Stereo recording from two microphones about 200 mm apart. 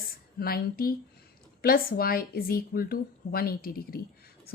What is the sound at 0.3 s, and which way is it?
A woman's voice, 50° left (ahead or behind).